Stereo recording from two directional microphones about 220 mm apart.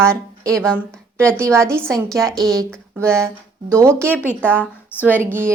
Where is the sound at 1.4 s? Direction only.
10° right (ahead or behind).